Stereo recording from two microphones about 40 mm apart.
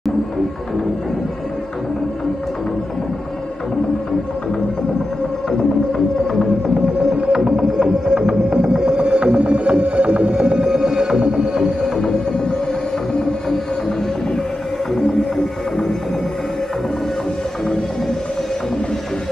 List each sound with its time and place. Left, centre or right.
7.2 s music: centre
10.7 s music: centre
15.0 s music: centre